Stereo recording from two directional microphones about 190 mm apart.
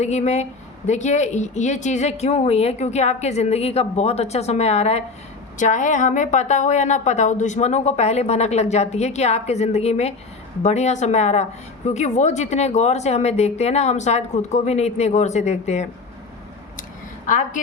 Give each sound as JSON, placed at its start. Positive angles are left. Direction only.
{"t": 0.0, "sound": "a woman's voice", "side_deg": 35}
{"t": 17.2, "sound": "a woman's voice", "side_deg": 40}